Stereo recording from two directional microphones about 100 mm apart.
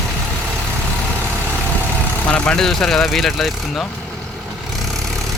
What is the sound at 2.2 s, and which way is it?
Speech, 15° left (ahead or behind).